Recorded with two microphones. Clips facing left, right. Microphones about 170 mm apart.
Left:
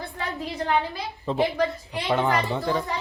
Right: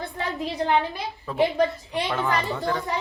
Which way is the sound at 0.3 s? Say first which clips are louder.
Right 2 dB; 20° right (ahead or behind).